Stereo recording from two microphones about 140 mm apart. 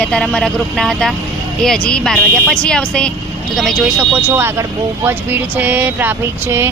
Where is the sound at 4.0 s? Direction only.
10° right (ahead or behind).